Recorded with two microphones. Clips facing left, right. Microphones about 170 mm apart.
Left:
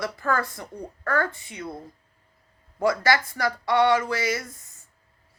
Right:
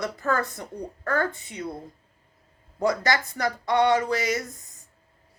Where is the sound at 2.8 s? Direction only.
20° right (ahead or behind).